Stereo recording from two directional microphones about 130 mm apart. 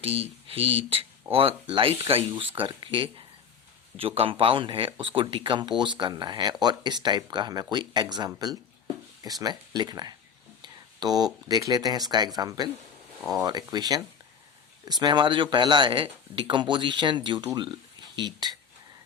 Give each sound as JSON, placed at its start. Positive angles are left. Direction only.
{"t": 0.0, "sound": "speech", "side_deg": -50}